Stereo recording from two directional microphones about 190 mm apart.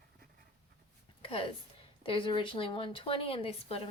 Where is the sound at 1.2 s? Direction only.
30° left (ahead or behind).